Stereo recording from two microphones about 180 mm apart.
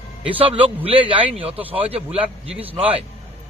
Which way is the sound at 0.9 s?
30° right (ahead or behind).